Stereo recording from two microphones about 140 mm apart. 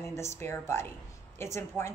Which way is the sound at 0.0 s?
20° left (ahead or behind).